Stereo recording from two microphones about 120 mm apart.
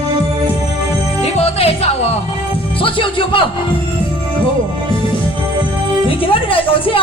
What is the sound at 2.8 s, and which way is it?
Music, 45° left (ahead or behind).